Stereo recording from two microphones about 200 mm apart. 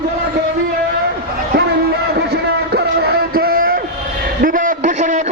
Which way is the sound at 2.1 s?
55° right (ahead or behind).